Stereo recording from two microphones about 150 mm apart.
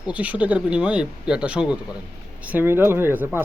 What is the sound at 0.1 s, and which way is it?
Speech, 10° right (ahead or behind).